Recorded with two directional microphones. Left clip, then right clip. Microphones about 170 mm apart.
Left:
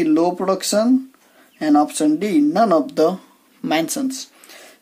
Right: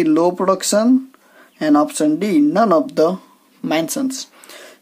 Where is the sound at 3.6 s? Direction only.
20° right (ahead or behind).